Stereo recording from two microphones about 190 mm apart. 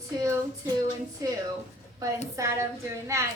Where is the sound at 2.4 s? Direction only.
15° right (ahead or behind).